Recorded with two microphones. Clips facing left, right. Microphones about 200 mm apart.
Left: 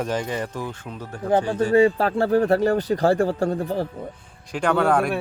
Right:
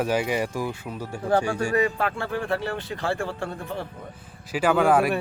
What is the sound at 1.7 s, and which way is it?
Speech, 30° left (ahead or behind).